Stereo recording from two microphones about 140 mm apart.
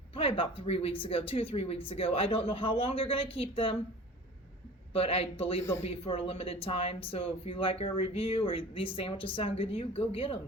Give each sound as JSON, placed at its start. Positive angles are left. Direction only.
{"t": 0.1, "sound": "speech", "side_deg": 40}
{"t": 4.9, "sound": "speech", "side_deg": 40}